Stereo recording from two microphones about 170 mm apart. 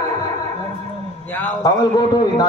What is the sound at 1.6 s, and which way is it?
Speech, 25° left (ahead or behind).